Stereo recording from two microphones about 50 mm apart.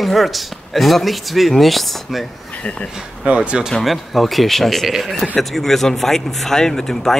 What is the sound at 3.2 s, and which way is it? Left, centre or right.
Speech, right.